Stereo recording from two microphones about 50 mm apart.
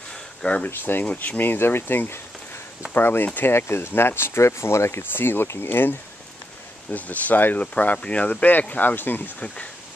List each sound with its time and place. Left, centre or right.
0.1 s a sound: centre
0.7 s speech: left
5.1 s speech: left
6.9 s speech: left